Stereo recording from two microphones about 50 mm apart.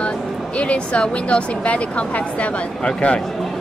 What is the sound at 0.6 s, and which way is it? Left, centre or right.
A woman's voice, left.